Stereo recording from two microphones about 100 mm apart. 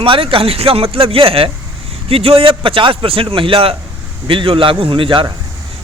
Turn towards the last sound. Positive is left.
turn(degrees=-60)  # may be behind; listen again after turning